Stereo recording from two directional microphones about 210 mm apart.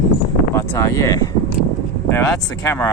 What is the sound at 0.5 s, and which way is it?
Speech, 15° left (ahead or behind).